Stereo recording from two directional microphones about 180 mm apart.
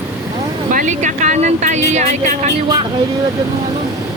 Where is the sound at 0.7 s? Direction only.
45° right (ahead or behind).